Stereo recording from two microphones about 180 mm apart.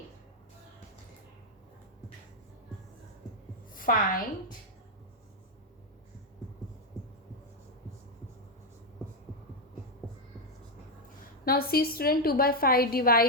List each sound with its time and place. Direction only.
3.8 s a woman's voice: 50° left (ahead or behind)
11.4 s a woman's voice: 55° left (ahead or behind)